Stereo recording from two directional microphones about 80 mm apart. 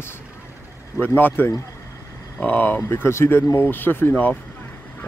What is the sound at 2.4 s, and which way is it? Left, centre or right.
Speech, left.